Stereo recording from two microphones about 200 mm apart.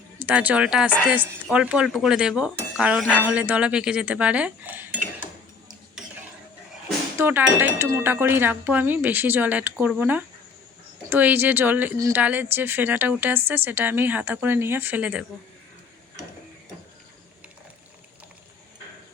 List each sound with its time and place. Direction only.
0.2 s speech: 5° right (ahead or behind)
7.2 s speech: 10° right (ahead or behind)